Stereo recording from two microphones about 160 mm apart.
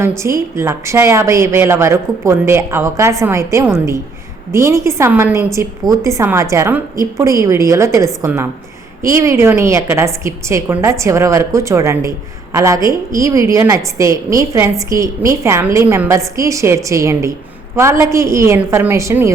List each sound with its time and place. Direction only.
0.2 s a woman's voice: 15° right (ahead or behind)